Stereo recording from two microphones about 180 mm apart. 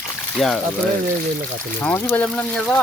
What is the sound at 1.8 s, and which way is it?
Speech, 10° left (ahead or behind).